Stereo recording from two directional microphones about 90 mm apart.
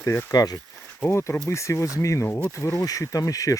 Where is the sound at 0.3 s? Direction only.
45° left (ahead or behind).